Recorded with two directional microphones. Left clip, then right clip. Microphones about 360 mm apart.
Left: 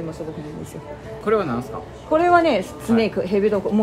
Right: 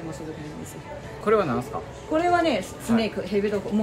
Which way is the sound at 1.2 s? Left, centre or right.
Centre.